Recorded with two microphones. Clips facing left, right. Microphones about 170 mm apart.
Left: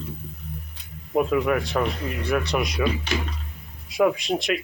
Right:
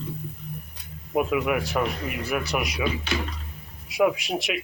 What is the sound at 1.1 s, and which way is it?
Speech, 5° right (ahead or behind).